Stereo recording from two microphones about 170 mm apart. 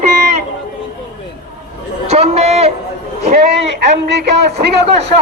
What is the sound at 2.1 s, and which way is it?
Speech, 40° right (ahead or behind).